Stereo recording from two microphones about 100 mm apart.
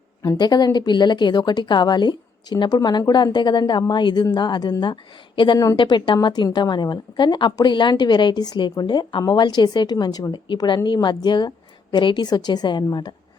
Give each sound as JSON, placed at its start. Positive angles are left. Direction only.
{"t": 0.2, "sound": "a woman's voice", "side_deg": 40}